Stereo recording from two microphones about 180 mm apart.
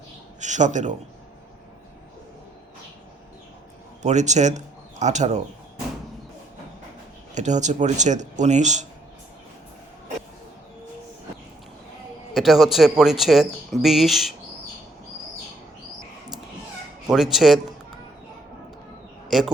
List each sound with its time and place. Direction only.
0.3 s a man's voice: 40° right (ahead or behind)
4.0 s speech: 40° right (ahead or behind)
7.3 s speech: 40° right (ahead or behind)
12.3 s speech: centre (ahead or behind)
17.1 s speech: centre (ahead or behind)
19.3 s speech: centre (ahead or behind)